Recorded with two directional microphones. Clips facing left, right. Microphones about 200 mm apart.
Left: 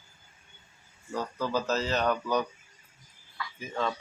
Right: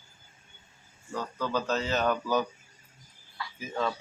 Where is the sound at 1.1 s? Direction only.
10° left (ahead or behind).